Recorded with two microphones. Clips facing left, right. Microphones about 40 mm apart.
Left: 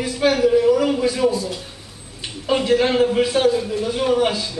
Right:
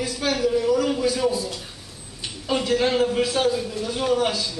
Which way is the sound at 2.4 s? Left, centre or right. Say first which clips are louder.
Left 4 dB; centre.